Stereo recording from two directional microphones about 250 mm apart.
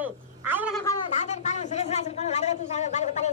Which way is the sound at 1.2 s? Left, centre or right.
Left.